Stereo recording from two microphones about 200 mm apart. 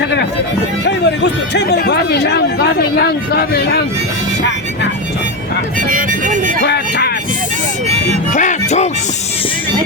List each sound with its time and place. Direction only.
0.0 s speech: 55° left (ahead or behind)
5.9 s speech: 45° right (ahead or behind)
6.6 s speech: 55° left (ahead or behind)
8.3 s speech: 40° left (ahead or behind)